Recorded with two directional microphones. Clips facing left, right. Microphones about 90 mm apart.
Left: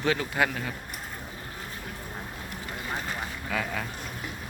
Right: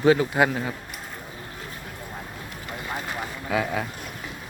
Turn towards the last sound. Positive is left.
turn(degrees=-15)  # may be behind; listen again after turning